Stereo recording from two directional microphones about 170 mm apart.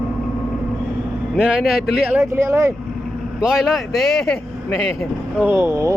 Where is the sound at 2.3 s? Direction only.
20° right (ahead or behind).